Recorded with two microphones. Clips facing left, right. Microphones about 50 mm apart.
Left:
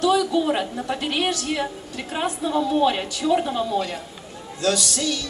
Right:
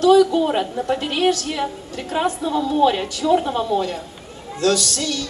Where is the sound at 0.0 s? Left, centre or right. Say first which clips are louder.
Right 6 dB; right.